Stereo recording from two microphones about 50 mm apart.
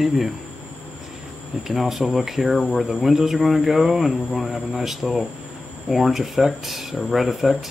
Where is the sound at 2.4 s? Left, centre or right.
Centre.